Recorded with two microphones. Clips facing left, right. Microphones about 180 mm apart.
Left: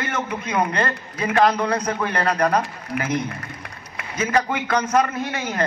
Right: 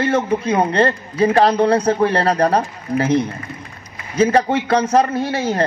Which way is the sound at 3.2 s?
65° left (ahead or behind).